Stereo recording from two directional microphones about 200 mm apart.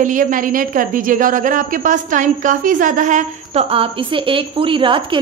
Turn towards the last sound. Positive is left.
turn(degrees=-25)  # may be behind; listen again after turning